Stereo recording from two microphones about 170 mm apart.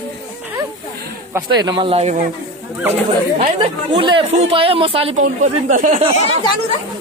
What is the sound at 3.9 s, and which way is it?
Speech, 30° right (ahead or behind).